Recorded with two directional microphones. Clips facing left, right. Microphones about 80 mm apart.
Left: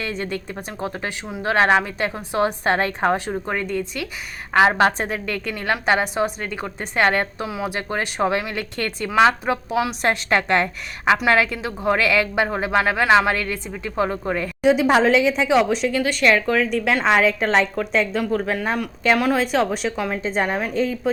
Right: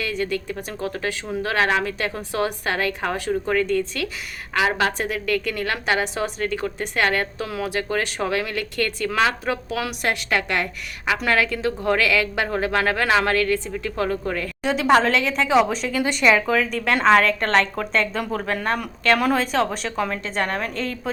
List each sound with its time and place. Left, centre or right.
0.0 s a woman's voice: left
4.8 s a woman's voice: left
7.4 s a woman's voice: centre
7.7 s a woman's voice: left; by 20.1 s centre
20.2 s a woman's voice: centre